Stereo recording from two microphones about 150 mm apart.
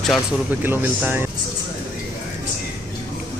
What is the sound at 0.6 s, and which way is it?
Speech, 15° right (ahead or behind).